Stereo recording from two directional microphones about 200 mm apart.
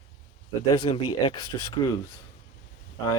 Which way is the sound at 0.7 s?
25° left (ahead or behind).